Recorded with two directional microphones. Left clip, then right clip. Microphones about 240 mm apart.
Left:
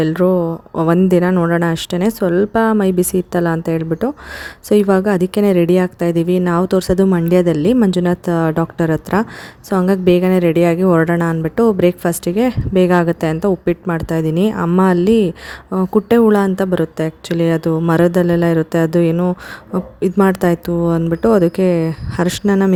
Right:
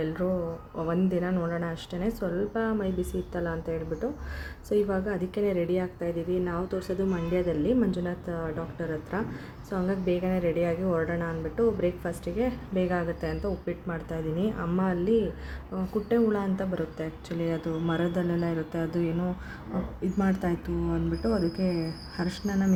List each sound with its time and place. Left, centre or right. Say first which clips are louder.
0.0 s a woman's voice: left 15 dB; left